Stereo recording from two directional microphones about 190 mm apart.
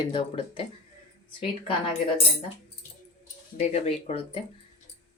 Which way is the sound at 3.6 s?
35° left (ahead or behind).